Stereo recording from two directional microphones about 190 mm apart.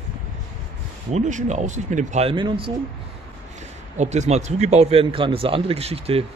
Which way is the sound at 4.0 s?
35° right (ahead or behind).